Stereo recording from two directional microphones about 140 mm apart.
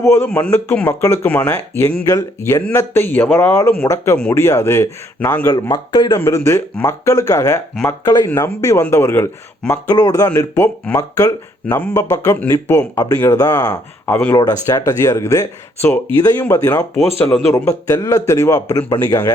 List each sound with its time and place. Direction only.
0.0 s speech: 20° left (ahead or behind)
14.1 s speech: 15° left (ahead or behind)
14.3 s speech: 25° left (ahead or behind)
16.9 s speech: 10° left (ahead or behind)